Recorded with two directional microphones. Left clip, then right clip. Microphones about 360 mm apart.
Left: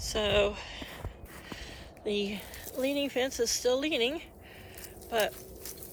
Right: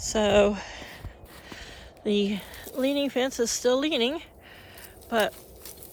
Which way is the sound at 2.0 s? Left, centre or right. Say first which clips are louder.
Right 6 dB; centre.